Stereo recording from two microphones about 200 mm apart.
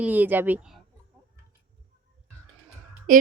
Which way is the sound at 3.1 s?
45° right (ahead or behind).